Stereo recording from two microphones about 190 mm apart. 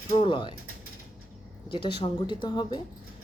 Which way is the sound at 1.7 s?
25° left (ahead or behind).